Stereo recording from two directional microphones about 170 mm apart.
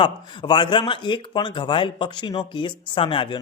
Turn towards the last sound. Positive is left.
turn(degrees=30)  # may be behind; listen again after turning